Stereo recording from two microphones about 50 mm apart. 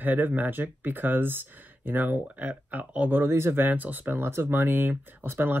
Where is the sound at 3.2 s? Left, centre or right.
Right.